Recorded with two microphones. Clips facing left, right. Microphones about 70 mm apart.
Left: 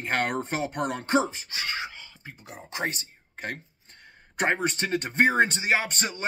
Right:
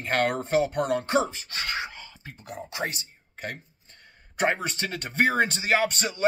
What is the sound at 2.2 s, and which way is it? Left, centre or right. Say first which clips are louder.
Speech: right 6 dB; left.